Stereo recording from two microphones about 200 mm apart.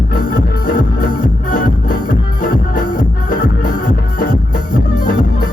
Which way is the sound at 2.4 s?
45° left (ahead or behind).